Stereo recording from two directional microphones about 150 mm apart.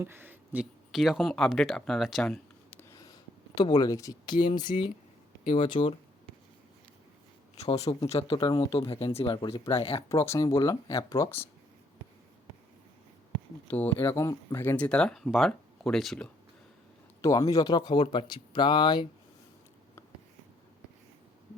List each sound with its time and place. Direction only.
0.0 s speech: 15° right (ahead or behind); by 2.8 s 10° left (ahead or behind)
3.0 s speech: 25° left (ahead or behind)
7.7 s speech: 40° left (ahead or behind)
10.1 s speech: 20° left (ahead or behind)
13.7 s speech: 10° left (ahead or behind)
14.0 s speech: 20° left (ahead or behind); by 16.3 s 5° left (ahead or behind)
17.2 s speech: 20° left (ahead or behind)